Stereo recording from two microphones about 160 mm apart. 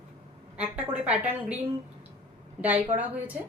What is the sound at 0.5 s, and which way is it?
A woman's voice, 10° right (ahead or behind).